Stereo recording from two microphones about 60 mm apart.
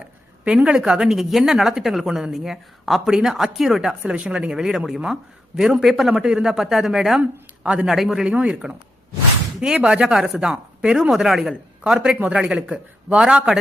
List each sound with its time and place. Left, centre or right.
0.4 s a woman's voice: centre
4.0 s a woman's voice: centre
7.2 s speech: right
7.9 s a man's voice: centre
8.2 s a woman's voice: centre